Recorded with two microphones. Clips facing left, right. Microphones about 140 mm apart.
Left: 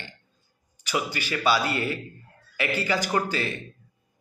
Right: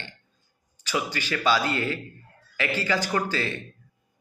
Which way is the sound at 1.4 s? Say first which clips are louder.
Even; 10° left (ahead or behind).